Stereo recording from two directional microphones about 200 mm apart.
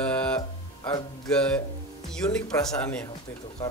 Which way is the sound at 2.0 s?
5° left (ahead or behind).